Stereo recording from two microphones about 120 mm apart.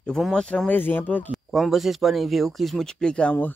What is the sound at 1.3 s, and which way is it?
Speech, centre (ahead or behind).